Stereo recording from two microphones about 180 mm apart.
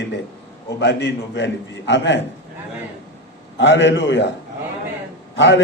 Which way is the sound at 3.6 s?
80° left.